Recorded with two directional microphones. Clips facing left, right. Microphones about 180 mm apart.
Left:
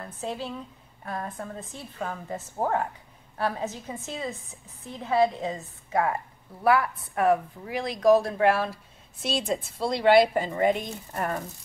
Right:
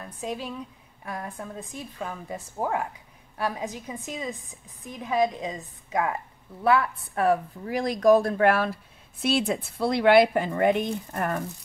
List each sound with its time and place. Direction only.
0.0 s a woman's voice: 15° right (ahead or behind); by 10.9 s 55° right (ahead or behind)